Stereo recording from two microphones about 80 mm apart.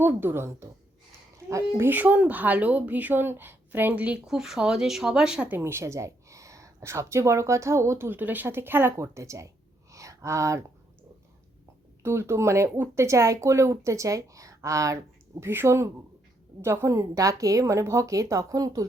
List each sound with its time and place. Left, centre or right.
0.0 s a woman's voice: right
1.9 s speech: right
4.3 s speech: centre
5.5 s speech: right
8.2 s speech: right
9.9 s a sound: right
12.0 s a woman's voice: right
15.4 s a woman's voice: right